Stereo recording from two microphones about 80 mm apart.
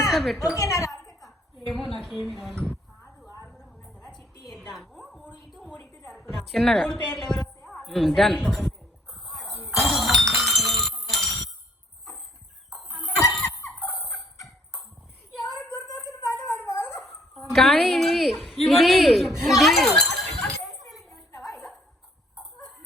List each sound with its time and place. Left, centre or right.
0.1 s a woman's voice: centre
0.5 s a woman's voice: left
1.2 s a sound: centre
1.8 s a woman's voice: centre
3.4 s a sound: centre
6.4 s a woman's voice: centre
8.4 s a sound: centre
12.7 s a sound: centre
13.7 s dog: centre
14.4 s clip-clop: centre
16.6 s dog: left
17.0 s speech: centre
20.0 s chink: centre
21.5 s music: centre